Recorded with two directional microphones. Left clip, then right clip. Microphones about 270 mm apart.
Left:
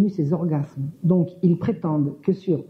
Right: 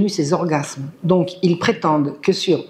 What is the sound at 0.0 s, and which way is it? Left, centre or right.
Speech, centre.